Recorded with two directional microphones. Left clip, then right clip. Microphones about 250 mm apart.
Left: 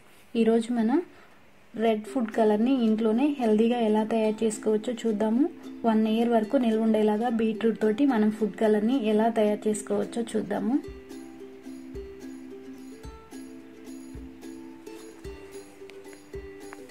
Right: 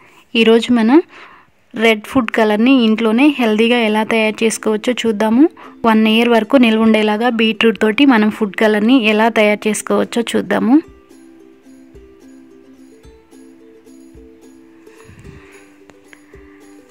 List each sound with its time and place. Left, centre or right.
0.7 s a woman's voice: right